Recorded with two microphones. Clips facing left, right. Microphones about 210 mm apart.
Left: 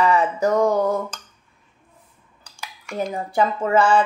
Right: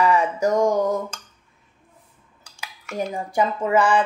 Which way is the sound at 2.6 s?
5° right (ahead or behind).